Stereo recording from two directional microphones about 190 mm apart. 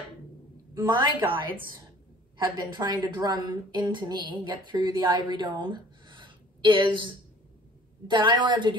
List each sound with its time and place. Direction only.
0.8 s a woman's voice: 25° right (ahead or behind)
2.8 s a woman's voice: 20° right (ahead or behind)